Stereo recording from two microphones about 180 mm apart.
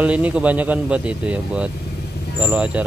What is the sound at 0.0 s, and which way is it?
Speech, 5° right (ahead or behind).